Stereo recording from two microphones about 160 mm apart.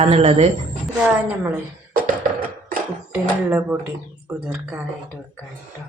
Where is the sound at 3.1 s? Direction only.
10° right (ahead or behind).